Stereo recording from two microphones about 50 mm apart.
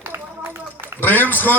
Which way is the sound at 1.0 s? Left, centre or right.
Left.